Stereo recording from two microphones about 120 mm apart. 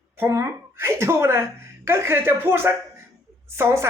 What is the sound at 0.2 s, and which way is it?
A woman's voice, 25° right (ahead or behind).